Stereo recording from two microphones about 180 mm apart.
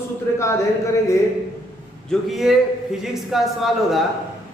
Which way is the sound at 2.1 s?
Centre (ahead or behind).